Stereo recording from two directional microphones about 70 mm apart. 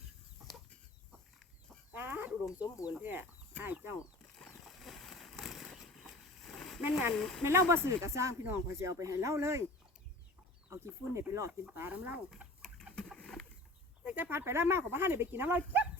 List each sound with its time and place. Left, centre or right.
1.9 s chicken: right
3.0 s speech: right
4.6 s vehicle: centre
5.7 s a sound: centre
7.2 s speech: centre
7.4 s speech: right
10.7 s speech: right
11.9 s speech: centre
12.6 s bird: centre
14.0 s a sound: centre
14.3 s speech: right